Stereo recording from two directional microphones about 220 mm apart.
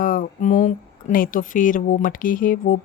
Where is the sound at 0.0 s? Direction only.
40° left (ahead or behind).